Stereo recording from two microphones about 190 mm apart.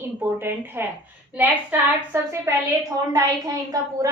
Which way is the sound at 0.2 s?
10° right (ahead or behind).